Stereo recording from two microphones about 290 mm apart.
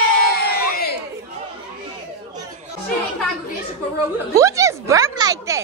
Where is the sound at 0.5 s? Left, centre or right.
Left.